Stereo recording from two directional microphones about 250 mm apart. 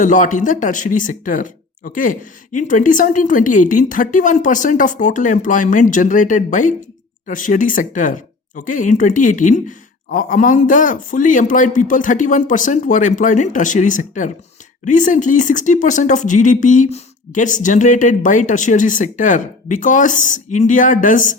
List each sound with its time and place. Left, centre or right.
0.0 s speech: left